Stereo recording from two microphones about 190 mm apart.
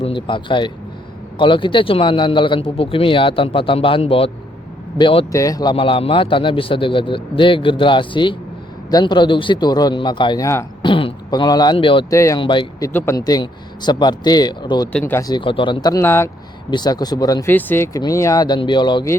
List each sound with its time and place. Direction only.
0.0 s a man's voice: 25° left (ahead or behind)
10.8 s a man's voice: 25° left (ahead or behind)
12.1 s speech: 15° left (ahead or behind)
12.9 s a man's voice: 10° left (ahead or behind)
14.9 s a man's voice: 10° left (ahead or behind)